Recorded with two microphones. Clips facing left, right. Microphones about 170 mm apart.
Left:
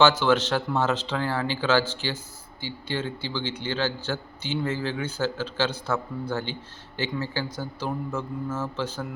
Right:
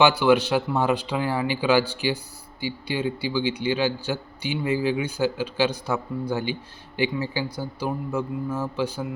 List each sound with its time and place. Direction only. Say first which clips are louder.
0.0 s a man's voice: right 2 dB; 10° right (ahead or behind)